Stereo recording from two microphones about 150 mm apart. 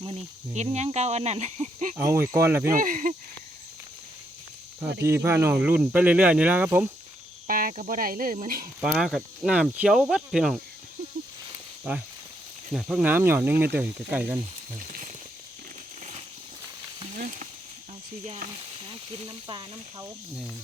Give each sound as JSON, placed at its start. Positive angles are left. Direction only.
{"t": 0.5, "sound": "speech", "side_deg": -50}
{"t": 2.0, "sound": "speech", "side_deg": -15}
{"t": 2.7, "sound": "speech", "side_deg": -60}
{"t": 5.0, "sound": "speech", "side_deg": -15}
{"t": 7.4, "sound": "cricket", "side_deg": -70}
{"t": 8.8, "sound": "speech", "side_deg": -5}
{"t": 12.7, "sound": "speech", "side_deg": -5}
{"t": 17.2, "sound": "a sound", "side_deg": -60}
{"t": 18.9, "sound": "speech", "side_deg": -35}